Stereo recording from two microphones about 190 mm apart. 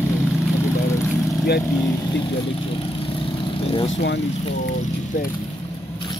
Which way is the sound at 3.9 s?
70° left (ahead or behind).